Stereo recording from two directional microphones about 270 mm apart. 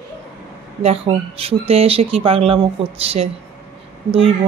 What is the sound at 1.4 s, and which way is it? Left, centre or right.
Speech, right.